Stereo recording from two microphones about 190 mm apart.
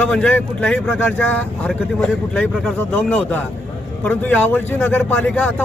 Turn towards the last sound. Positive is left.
turn(degrees=5)  # may be behind; listen again after turning